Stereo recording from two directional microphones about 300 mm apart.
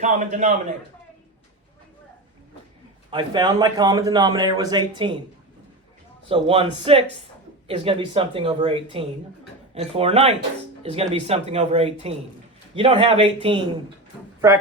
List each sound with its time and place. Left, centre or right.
0.0 s speech: right
3.1 s a man's voice: centre
6.2 s a man's voice: centre